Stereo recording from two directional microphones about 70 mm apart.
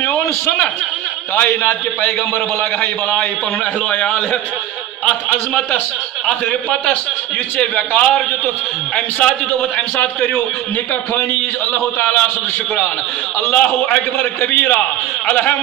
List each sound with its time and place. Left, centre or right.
1.3 s a man's voice: left
7.5 s a man's voice: centre
11.7 s a man's voice: left
13.5 s a man's voice: centre